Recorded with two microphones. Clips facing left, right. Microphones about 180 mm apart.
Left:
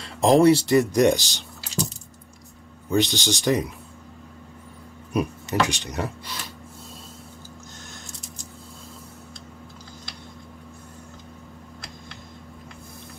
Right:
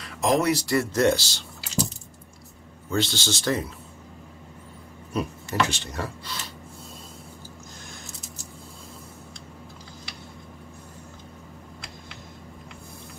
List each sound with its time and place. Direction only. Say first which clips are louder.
0.0 s speech: left 7 dB; 30° left (ahead or behind)
2.9 s speech: left 4 dB; 15° left (ahead or behind)
5.1 s speech: left 3 dB; 15° left (ahead or behind)